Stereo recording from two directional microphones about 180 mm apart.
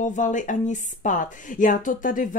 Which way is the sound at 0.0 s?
45° left (ahead or behind).